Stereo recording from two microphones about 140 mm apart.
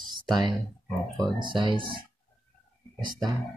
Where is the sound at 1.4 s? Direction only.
35° right (ahead or behind).